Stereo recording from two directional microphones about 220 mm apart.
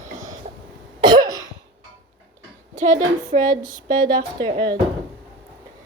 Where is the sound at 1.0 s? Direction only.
20° right (ahead or behind).